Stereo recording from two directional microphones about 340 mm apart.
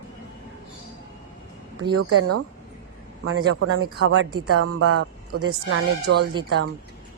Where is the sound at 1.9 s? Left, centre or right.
Right.